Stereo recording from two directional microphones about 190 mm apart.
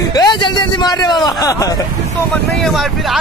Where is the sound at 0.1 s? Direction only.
20° left (ahead or behind).